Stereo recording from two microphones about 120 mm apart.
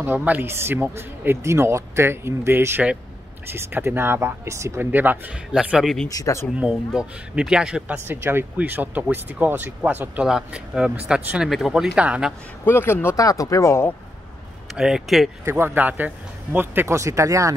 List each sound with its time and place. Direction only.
0.0 s speech: 15° right (ahead or behind)
6.0 s speech: 25° left (ahead or behind)
6.6 s speech: 5° right (ahead or behind)
8.1 s speech: 20° right (ahead or behind)
12.6 s speech: 20° left (ahead or behind)
14.8 s speech: 5° right (ahead or behind)
15.4 s speech: 20° right (ahead or behind)